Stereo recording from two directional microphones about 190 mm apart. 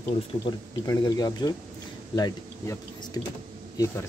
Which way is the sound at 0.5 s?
20° left (ahead or behind).